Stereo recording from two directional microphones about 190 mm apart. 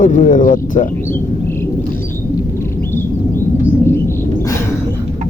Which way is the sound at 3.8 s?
15° left (ahead or behind).